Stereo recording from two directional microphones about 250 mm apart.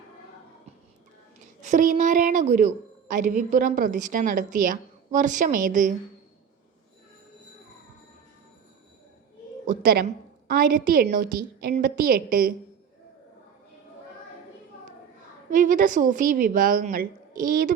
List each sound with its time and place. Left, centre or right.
1.6 s a woman's voice: right
9.6 s a woman's voice: right
15.4 s a woman's voice: right